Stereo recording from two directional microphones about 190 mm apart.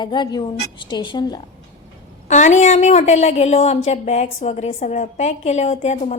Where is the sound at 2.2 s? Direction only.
40° left (ahead or behind).